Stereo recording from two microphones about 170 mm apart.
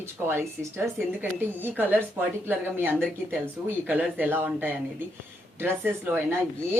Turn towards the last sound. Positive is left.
turn(degrees=-10)  # may be behind; listen again after turning